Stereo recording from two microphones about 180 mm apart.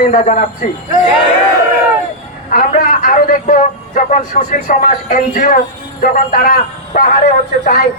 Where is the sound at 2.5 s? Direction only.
45° left (ahead or behind).